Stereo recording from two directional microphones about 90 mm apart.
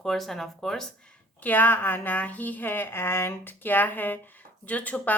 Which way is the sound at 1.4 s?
20° left (ahead or behind).